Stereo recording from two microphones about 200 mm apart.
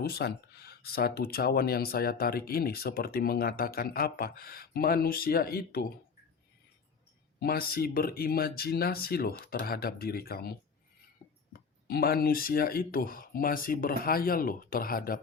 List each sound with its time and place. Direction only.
0.0 s speech: 50° left (ahead or behind)
7.3 s speech: 50° left (ahead or behind)
11.2 s glass: 35° left (ahead or behind)
11.9 s speech: 50° left (ahead or behind)